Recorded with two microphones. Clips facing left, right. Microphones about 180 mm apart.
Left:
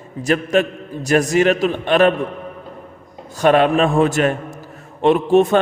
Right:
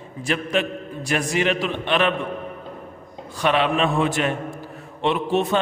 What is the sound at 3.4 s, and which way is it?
A man's voice, 45° left (ahead or behind).